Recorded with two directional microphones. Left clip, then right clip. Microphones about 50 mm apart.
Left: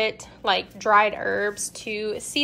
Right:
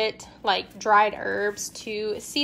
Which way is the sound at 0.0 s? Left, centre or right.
Right.